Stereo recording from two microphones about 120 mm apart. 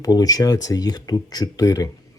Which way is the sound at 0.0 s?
30° left (ahead or behind).